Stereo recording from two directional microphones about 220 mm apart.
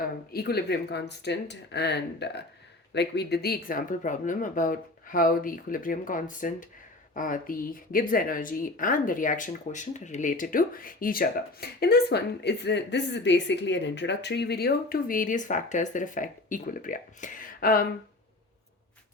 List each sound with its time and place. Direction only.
0.0 s speech: 45° left (ahead or behind)